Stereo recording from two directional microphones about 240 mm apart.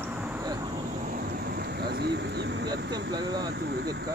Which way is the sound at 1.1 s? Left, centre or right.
Right.